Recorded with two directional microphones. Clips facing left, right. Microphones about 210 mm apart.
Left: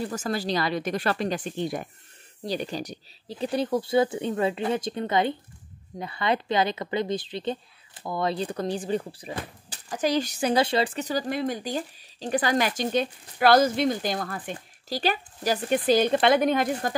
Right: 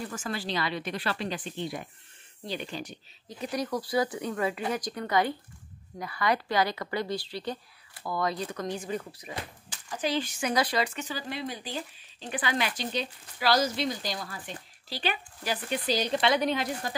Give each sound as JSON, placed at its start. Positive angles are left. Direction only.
{"t": 0.0, "sound": "a woman's voice", "side_deg": 40}